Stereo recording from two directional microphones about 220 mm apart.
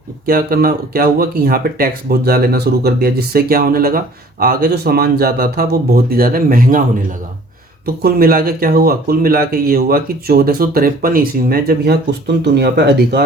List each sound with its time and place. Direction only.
0.3 s speech: 40° right (ahead or behind)
7.9 s speech: 45° right (ahead or behind)